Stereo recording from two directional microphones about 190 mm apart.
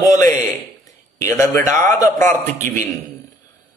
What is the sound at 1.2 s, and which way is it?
Speech, 15° left (ahead or behind).